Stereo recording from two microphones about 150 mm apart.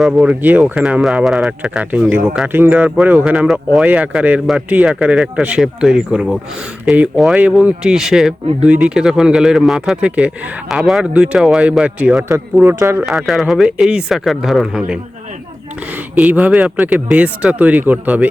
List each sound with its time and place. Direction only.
0.0 s speech: 5° right (ahead or behind)
13.1 s speech: centre (ahead or behind)
16.1 s speech: 10° right (ahead or behind)